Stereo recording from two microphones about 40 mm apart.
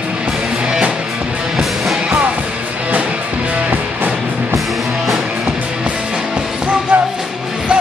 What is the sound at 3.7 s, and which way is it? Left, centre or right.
Music, right.